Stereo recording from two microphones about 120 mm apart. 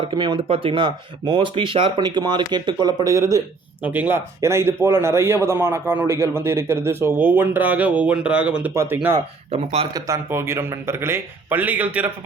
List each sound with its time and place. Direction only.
0.0 s speech: 45° right (ahead or behind); by 3.4 s 25° right (ahead or behind)
3.8 s speech: 15° right (ahead or behind)
8.7 s speech: 25° right (ahead or behind)